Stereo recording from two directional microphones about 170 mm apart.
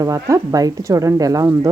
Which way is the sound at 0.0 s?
20° right (ahead or behind).